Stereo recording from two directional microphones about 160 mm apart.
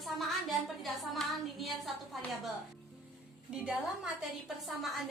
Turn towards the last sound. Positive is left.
turn(degrees=0)  # may be behind; listen again after turning